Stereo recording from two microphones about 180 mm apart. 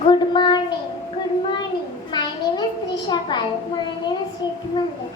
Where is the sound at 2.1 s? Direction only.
25° left (ahead or behind).